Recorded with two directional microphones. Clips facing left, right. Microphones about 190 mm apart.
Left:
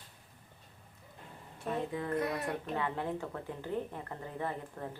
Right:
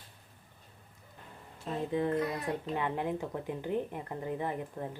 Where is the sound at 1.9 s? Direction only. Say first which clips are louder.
Right 7 dB; 25° right (ahead or behind).